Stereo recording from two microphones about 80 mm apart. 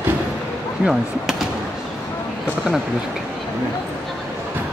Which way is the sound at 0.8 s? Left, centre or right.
Centre.